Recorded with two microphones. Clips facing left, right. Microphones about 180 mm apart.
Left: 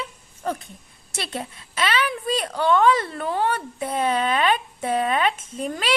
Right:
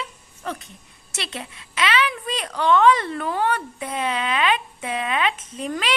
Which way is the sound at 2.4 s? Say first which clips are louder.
Right 2 dB; 35° left (ahead or behind).